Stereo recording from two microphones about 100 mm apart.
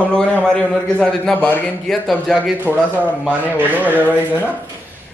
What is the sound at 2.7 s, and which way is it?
A man's voice, 15° right (ahead or behind).